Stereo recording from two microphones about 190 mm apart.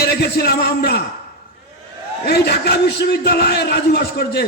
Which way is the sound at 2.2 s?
60° left (ahead or behind).